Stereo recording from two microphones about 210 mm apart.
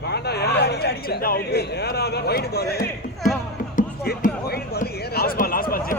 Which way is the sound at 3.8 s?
45° left (ahead or behind).